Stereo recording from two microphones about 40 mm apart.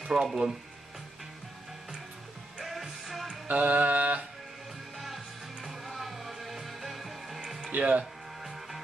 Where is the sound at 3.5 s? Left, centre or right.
Right.